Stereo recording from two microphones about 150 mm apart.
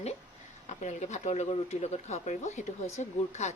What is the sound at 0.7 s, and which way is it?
Speech, 50° left (ahead or behind).